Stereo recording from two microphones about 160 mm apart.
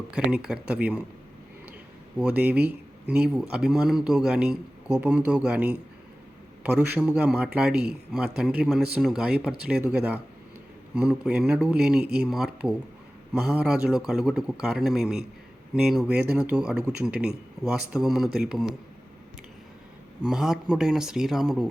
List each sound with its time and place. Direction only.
0.1 s speech: 5° right (ahead or behind)
2.1 s a man's voice: 10° right (ahead or behind)
20.2 s a man's voice: 5° right (ahead or behind)